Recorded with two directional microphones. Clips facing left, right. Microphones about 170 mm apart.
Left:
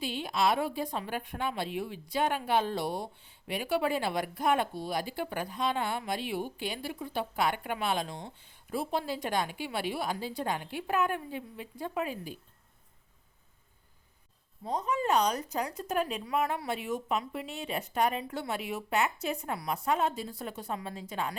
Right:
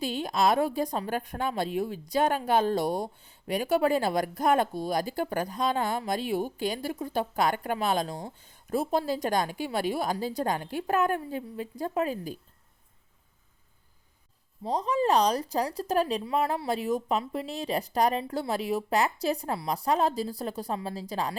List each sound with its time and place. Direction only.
0.0 s a woman's voice: 40° right (ahead or behind)
14.6 s a woman's voice: 35° right (ahead or behind)